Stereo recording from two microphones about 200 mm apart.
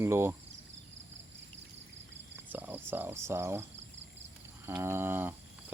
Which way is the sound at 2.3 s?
10° right (ahead or behind).